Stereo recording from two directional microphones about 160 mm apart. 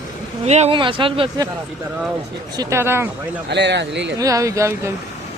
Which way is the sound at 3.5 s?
90° right.